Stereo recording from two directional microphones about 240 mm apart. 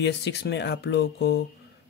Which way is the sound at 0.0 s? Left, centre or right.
Left.